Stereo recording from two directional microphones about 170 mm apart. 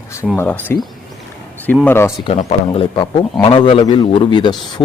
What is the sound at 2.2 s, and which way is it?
A man's voice, 40° left (ahead or behind).